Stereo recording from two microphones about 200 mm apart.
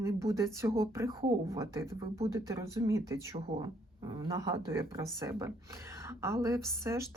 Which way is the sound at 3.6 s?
20° right (ahead or behind).